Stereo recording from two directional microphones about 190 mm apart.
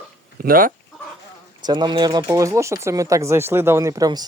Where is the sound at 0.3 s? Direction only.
50° right (ahead or behind).